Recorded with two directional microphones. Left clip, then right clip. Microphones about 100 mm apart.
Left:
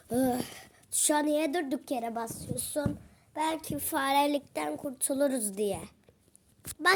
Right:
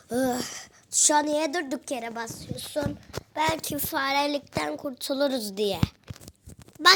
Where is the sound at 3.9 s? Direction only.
45° left (ahead or behind).